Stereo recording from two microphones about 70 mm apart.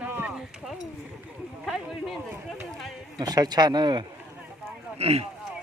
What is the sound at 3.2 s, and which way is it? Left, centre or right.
Speech, right.